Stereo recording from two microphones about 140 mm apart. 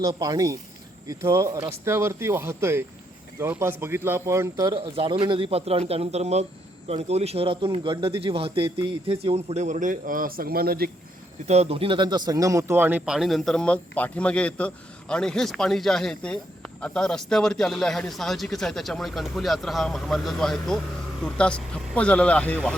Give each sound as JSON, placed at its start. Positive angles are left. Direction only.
{"t": 0.2, "sound": "speech", "side_deg": -25}
{"t": 4.7, "sound": "a man's voice", "side_deg": -40}
{"t": 11.4, "sound": "speech", "side_deg": -50}
{"t": 13.1, "sound": "a man's voice", "side_deg": 0}